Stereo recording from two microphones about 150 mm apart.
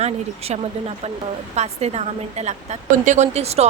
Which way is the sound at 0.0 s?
45° right (ahead or behind).